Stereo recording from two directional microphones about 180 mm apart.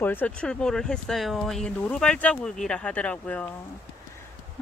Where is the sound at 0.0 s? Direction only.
10° left (ahead or behind).